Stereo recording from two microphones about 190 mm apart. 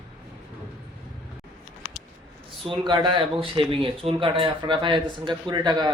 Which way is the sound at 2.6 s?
25° right (ahead or behind).